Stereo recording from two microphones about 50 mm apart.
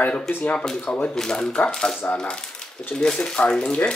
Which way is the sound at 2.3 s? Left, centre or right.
Centre.